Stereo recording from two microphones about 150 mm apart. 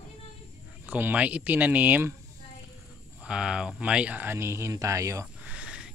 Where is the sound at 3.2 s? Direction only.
5° right (ahead or behind).